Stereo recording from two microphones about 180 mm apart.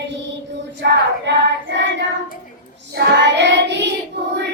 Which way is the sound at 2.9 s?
75° right (ahead or behind).